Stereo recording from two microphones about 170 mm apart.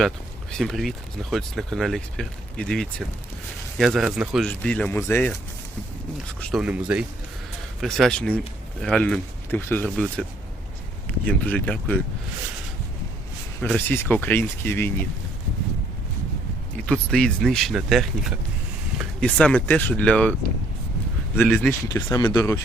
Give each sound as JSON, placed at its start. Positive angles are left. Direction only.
{"t": 0.5, "sound": "speech", "side_deg": 0}
{"t": 6.4, "sound": "speech", "side_deg": -5}
{"t": 11.3, "sound": "speech", "side_deg": 10}
{"t": 13.6, "sound": "speech", "side_deg": 10}
{"t": 16.7, "sound": "speech", "side_deg": 5}
{"t": 19.2, "sound": "speech", "side_deg": 5}
{"t": 21.3, "sound": "speech", "side_deg": 0}
{"t": 21.7, "sound": "speech", "side_deg": 15}